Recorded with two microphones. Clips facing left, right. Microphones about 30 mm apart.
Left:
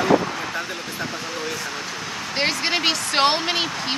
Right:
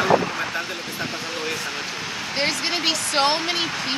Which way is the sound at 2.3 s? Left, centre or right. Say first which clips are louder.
Left 2 dB; centre.